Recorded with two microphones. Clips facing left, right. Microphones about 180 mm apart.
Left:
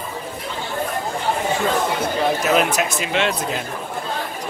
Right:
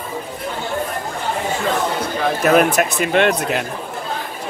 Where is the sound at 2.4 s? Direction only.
55° right (ahead or behind).